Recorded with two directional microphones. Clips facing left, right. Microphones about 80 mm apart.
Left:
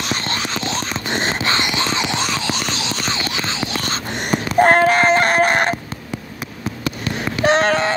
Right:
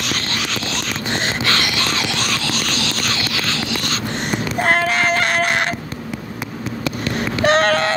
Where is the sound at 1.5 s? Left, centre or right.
Left.